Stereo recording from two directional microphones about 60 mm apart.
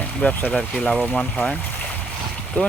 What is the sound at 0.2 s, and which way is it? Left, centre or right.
Speech, centre.